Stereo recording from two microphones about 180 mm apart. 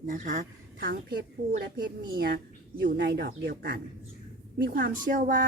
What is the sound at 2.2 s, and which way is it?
A woman's voice, 60° right (ahead or behind).